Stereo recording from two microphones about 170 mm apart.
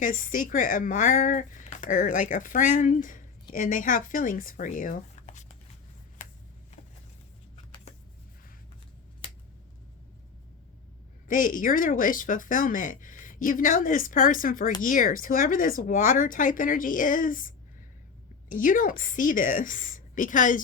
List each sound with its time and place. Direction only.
0.0 s speech: 55° left (ahead or behind)
6.2 s a sound: 50° left (ahead or behind)
7.5 s vehicle: 30° left (ahead or behind)
11.3 s speech: 50° left (ahead or behind)